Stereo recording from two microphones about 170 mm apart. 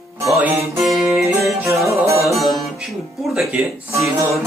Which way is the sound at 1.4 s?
Centre (ahead or behind).